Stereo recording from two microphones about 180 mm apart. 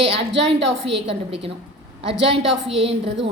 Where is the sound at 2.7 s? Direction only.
35° right (ahead or behind).